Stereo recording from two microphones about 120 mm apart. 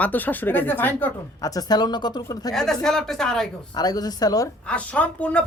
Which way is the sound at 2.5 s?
5° left (ahead or behind).